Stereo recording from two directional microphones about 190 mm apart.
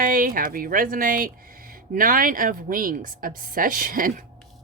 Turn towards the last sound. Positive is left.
turn(degrees=-45)  # may be behind; listen again after turning